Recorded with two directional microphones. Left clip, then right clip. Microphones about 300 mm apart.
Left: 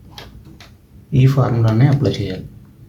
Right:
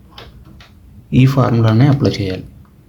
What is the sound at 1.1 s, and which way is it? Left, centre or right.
Speech, right.